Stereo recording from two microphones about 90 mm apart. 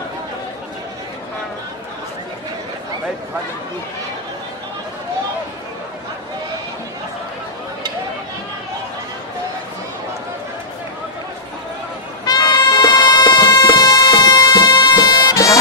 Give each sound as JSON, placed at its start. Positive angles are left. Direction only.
{"t": 12.3, "sound": "music", "side_deg": 55}